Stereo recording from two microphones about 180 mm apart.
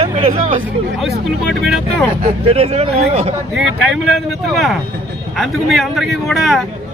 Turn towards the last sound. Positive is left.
turn(degrees=0)  # may be behind; listen again after turning